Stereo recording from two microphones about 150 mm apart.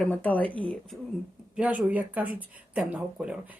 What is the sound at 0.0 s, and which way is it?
Speech, 10° left (ahead or behind).